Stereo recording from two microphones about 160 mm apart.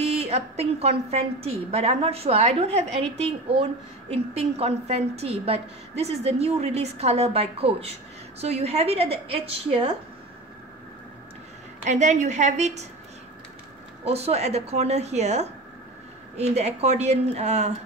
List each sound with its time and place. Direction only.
0.0 s a woman's voice: 40° right (ahead or behind)
11.8 s a woman's voice: 50° right (ahead or behind)
14.0 s a woman's voice: 40° right (ahead or behind)